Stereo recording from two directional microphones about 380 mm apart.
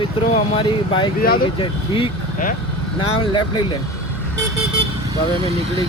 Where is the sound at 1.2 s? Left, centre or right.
Left.